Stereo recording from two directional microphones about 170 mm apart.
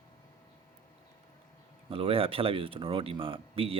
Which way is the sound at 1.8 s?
35° right (ahead or behind).